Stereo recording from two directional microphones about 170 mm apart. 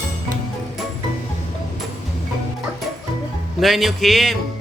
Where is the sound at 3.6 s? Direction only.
Centre (ahead or behind).